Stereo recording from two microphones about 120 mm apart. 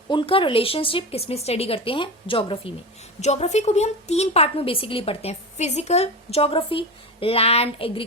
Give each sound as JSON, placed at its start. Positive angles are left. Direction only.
{"t": 0.1, "sound": "speech", "side_deg": 45}
{"t": 3.2, "sound": "a woman's voice", "side_deg": 70}